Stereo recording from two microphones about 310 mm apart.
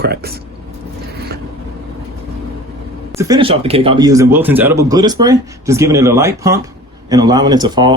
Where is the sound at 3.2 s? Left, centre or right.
Centre.